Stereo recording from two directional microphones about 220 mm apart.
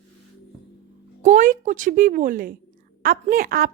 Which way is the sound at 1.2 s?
35° right (ahead or behind).